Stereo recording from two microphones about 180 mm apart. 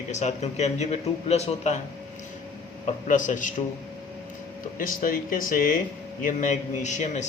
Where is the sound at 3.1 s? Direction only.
45° left (ahead or behind).